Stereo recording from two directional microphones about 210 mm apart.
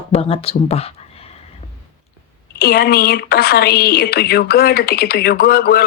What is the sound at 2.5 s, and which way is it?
A woman's voice, 50° left (ahead or behind).